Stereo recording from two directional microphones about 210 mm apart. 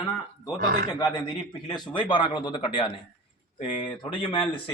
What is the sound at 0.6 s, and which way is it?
Speech, 45° right (ahead or behind).